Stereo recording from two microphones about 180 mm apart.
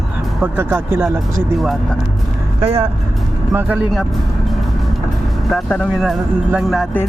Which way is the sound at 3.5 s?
10° right (ahead or behind).